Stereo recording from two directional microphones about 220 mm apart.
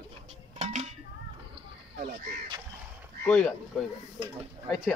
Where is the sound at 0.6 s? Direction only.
30° right (ahead or behind).